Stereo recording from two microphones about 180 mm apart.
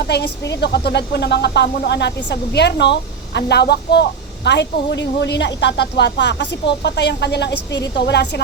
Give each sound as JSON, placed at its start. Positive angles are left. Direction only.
{"t": 0.1, "sound": "a woman's voice", "side_deg": 70}